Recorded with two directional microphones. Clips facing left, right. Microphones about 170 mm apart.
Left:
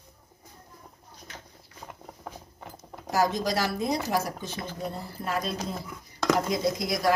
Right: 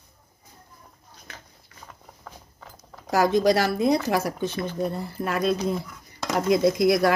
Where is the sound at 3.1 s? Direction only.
65° right (ahead or behind).